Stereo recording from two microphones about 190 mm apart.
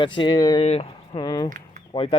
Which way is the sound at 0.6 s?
30° left (ahead or behind).